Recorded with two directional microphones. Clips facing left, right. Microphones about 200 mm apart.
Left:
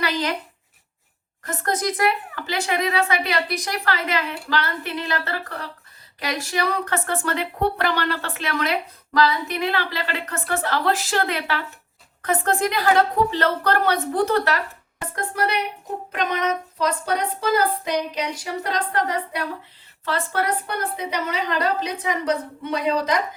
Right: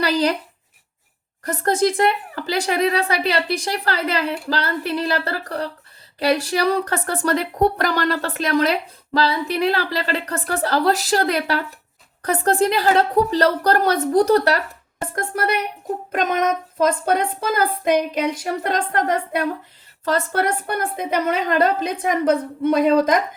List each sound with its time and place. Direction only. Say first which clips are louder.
0.0 s a woman's voice: right 5 dB; 35° right (ahead or behind)
1.5 s speech: right 6 dB; 30° right (ahead or behind)
15.1 s child singing: right 2 dB; 45° right (ahead or behind)